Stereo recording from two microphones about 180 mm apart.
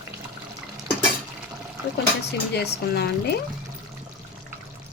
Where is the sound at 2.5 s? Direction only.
65° left (ahead or behind).